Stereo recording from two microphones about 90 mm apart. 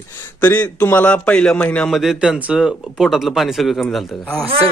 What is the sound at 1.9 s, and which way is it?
A man's voice, 5° right (ahead or behind).